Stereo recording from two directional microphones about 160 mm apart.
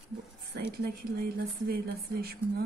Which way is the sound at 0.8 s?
75° right (ahead or behind).